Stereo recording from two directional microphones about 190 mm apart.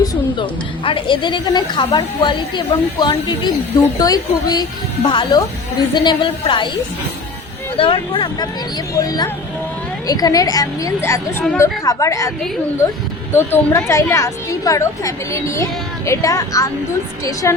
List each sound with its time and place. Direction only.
0.0 s a sound: 20° left (ahead or behind)
0.9 s a woman's voice: 25° left (ahead or behind)
7.8 s a woman's voice: 25° left (ahead or behind)
13.3 s a woman's voice: 10° left (ahead or behind)